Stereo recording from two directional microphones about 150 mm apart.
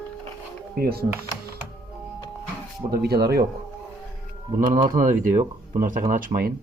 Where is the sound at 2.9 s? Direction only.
90° right.